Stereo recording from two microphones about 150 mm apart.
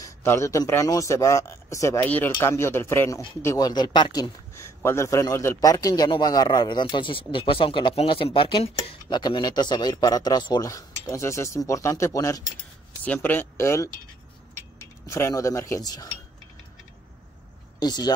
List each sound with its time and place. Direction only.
0.0 s speech: 20° left (ahead or behind); by 9.2 s 40° left (ahead or behind)
9.2 s speech: 30° left (ahead or behind)
13.0 s speech: 10° left (ahead or behind)
17.7 s speech: 30° left (ahead or behind)